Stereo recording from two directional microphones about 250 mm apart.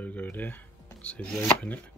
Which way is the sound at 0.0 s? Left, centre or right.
Centre.